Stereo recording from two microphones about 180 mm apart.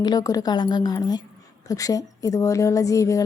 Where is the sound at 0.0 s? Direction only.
20° left (ahead or behind).